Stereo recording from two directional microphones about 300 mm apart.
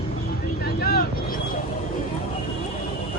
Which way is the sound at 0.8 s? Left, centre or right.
Left.